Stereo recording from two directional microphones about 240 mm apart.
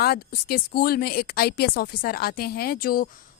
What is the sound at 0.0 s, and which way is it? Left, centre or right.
Speech, left.